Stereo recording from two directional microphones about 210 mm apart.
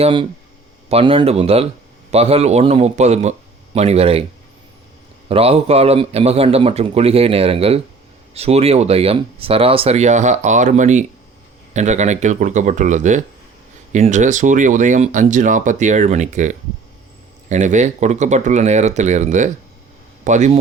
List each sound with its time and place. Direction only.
0.0 s a man's voice: 25° right (ahead or behind)
5.3 s a man's voice: 30° right (ahead or behind)